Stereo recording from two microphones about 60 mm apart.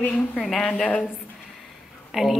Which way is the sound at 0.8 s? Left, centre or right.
Left.